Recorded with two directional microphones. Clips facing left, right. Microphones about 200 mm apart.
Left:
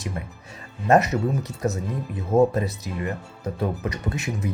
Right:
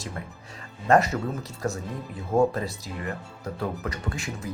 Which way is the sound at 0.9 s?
20° left (ahead or behind).